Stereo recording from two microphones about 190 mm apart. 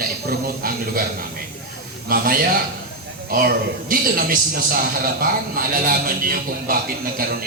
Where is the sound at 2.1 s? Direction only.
50° right (ahead or behind).